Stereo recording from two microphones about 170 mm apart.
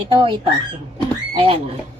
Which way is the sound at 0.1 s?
30° right (ahead or behind).